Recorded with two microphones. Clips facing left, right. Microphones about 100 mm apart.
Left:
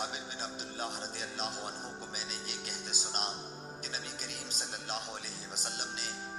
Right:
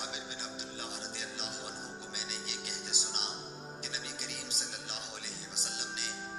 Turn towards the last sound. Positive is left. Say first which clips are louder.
# left 1 dB
turn(degrees=45)  # may be behind; listen again after turning